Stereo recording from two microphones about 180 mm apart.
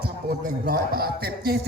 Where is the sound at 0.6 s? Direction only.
55° right (ahead or behind).